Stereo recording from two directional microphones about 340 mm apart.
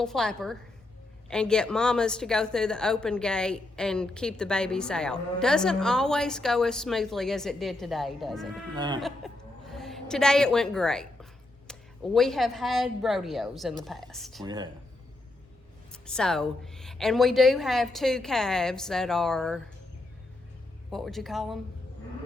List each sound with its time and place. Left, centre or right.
0.0 s speech: centre
8.7 s speech: centre
9.0 s chuckle: centre
11.7 s speech: centre
14.4 s speech: centre
15.9 s speech: centre
20.9 s speech: centre